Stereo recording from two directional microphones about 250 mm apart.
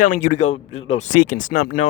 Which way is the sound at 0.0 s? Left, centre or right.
Left.